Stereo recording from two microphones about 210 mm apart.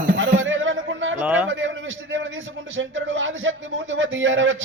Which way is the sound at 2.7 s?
65° right (ahead or behind).